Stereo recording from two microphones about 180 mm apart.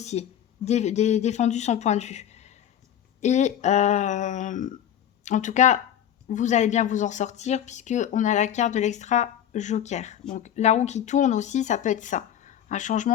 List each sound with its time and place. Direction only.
0.0 s speech: 40° left (ahead or behind)